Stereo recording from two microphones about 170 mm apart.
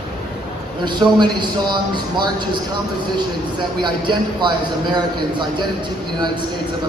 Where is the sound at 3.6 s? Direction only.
25° right (ahead or behind).